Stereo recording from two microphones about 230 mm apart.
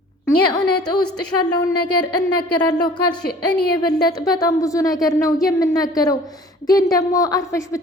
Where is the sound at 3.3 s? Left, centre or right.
Left.